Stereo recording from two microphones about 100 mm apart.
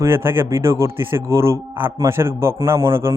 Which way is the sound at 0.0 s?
25° right (ahead or behind).